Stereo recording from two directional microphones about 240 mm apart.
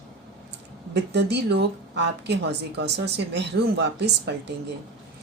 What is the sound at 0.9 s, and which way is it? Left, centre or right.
A woman's voice, right.